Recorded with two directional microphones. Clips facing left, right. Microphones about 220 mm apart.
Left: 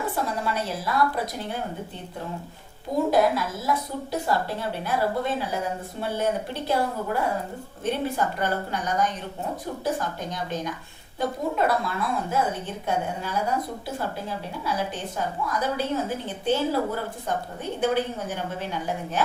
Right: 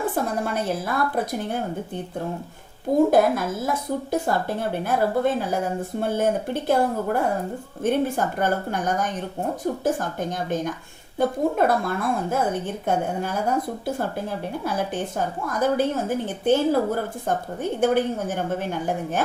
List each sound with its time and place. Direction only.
0.0 s a woman's voice: 50° right (ahead or behind)
3.1 s a woman's voice: 50° right (ahead or behind)